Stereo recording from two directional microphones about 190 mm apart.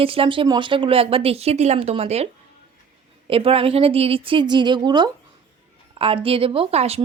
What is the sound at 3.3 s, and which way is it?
Speech, 30° right (ahead or behind).